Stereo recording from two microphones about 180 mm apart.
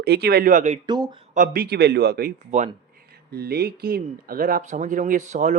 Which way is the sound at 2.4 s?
40° right (ahead or behind).